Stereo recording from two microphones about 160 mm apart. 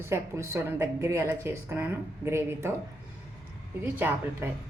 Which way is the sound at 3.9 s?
15° right (ahead or behind).